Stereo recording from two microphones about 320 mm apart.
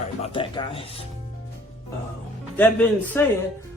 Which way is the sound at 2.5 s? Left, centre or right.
Centre.